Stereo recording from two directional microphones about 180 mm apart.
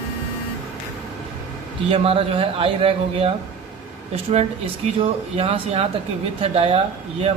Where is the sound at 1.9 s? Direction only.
30° right (ahead or behind).